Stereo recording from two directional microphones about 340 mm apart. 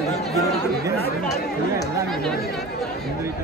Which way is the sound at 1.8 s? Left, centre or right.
Centre.